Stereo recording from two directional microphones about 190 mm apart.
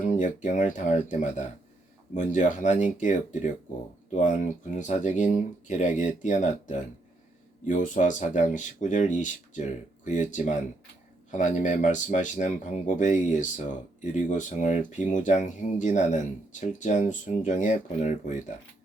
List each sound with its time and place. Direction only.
0.0 s speech: 40° left (ahead or behind)